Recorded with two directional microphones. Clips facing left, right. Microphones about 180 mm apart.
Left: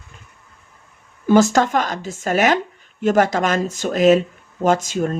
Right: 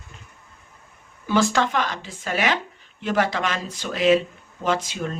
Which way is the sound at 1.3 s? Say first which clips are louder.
Left 6 dB; 45° left (ahead or behind).